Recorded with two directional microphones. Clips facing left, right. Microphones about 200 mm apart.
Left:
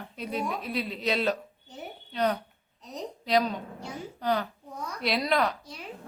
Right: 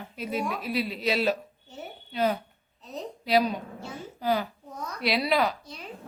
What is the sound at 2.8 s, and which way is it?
Speech, 15° left (ahead or behind).